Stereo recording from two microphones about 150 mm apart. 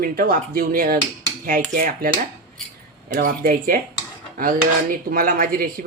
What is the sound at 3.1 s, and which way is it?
Speech, 70° right (ahead or behind).